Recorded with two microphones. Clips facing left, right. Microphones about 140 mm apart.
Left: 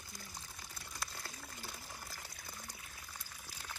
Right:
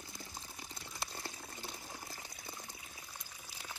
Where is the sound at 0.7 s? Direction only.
25° right (ahead or behind).